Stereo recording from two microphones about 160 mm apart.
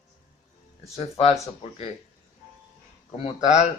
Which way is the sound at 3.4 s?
50° left (ahead or behind).